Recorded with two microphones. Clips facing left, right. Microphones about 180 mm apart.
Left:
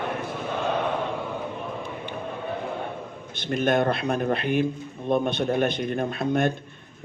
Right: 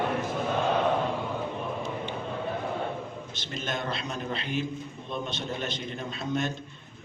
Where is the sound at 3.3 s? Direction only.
55° left (ahead or behind).